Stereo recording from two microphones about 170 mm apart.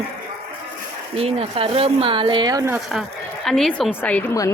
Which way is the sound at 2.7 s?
Centre (ahead or behind).